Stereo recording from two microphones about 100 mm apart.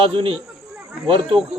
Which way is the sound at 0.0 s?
60° right (ahead or behind).